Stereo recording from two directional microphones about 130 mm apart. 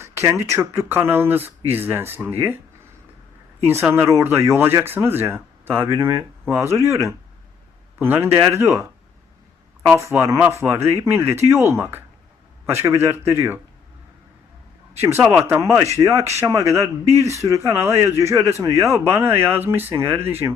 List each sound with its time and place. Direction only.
0.0 s speech: 20° right (ahead or behind)
3.6 s speech: 20° right (ahead or behind)
9.9 s speech: 20° right (ahead or behind)
15.0 s speech: 20° right (ahead or behind)